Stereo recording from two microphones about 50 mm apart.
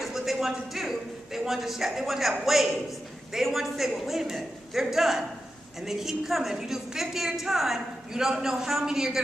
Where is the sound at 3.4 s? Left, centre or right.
Centre.